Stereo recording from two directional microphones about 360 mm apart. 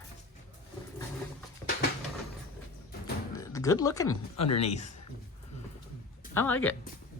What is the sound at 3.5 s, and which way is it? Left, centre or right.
Speech, centre.